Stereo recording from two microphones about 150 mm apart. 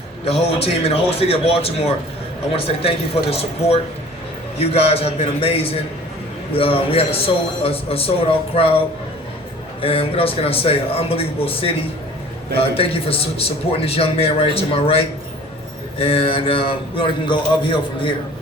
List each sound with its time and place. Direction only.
0.3 s a man's voice: 40° left (ahead or behind)
9.8 s a man's voice: 40° left (ahead or behind)